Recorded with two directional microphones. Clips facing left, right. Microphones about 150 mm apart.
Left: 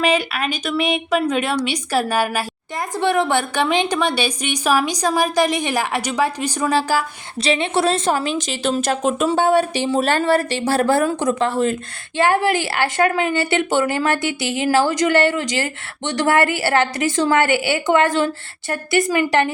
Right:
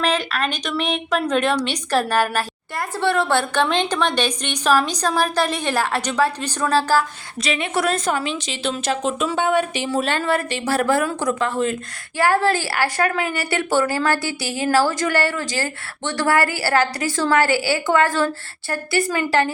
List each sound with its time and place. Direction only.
0.0 s a woman's voice: 10° left (ahead or behind)
7.4 s a woman's voice: 30° left (ahead or behind)
8.2 s a woman's voice: 45° left (ahead or behind)
9.3 s speech: 35° left (ahead or behind)
12.1 s a woman's voice: 20° left (ahead or behind)